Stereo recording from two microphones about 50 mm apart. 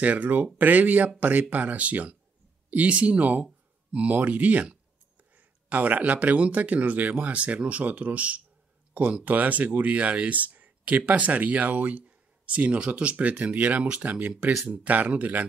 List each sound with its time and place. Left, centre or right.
0.0 s speech: right